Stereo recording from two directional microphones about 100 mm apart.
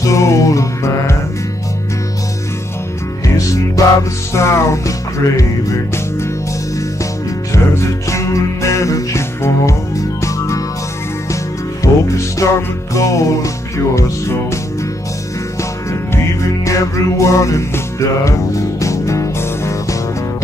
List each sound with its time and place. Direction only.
0.0 s music: 30° left (ahead or behind)
3.8 s music: 35° left (ahead or behind)
7.5 s music: 30° left (ahead or behind)
11.8 s music: 35° left (ahead or behind)
16.6 s music: 35° left (ahead or behind)